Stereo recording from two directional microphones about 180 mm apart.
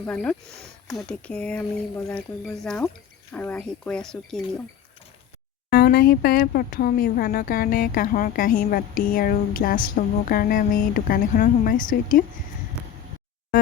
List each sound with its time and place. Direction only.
0.0 s speech: 5° left (ahead or behind)
5.7 s speech: 55° left (ahead or behind)